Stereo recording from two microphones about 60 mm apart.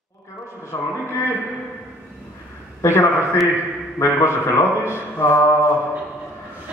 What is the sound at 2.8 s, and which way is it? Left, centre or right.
A man's voice, left.